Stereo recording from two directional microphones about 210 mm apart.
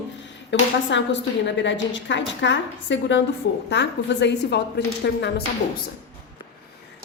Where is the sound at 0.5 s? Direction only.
60° left (ahead or behind).